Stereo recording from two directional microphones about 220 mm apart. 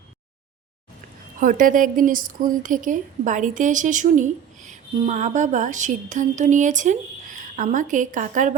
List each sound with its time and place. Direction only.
1.4 s a woman's voice: 40° right (ahead or behind)